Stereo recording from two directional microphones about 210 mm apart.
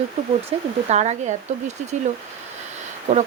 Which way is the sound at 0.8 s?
30° right (ahead or behind).